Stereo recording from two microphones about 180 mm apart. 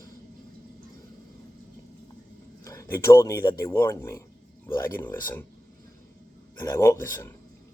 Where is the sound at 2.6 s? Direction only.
15° left (ahead or behind).